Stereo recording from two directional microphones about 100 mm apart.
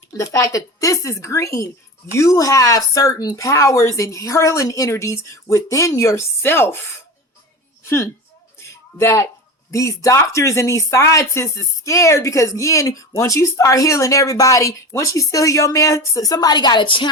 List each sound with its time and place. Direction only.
0.2 s speech: 30° left (ahead or behind)
8.6 s a sound: 30° left (ahead or behind)
9.7 s speech: 30° left (ahead or behind); by 17.1 s 55° left (ahead or behind)